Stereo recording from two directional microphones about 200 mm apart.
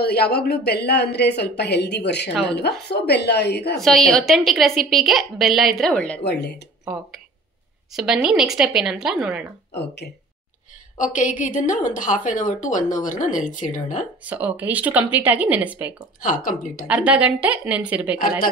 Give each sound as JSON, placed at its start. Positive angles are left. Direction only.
{"t": 0.0, "sound": "speech", "side_deg": 55}
{"t": 3.7, "sound": "a woman's voice", "side_deg": 0}
{"t": 6.2, "sound": "speech", "side_deg": 55}
{"t": 7.9, "sound": "a woman's voice", "side_deg": -5}
{"t": 11.0, "sound": "a woman's voice", "side_deg": 40}
{"t": 14.2, "sound": "speech", "side_deg": -10}
{"t": 16.4, "sound": "speech", "side_deg": 45}
{"t": 16.8, "sound": "speech", "side_deg": -5}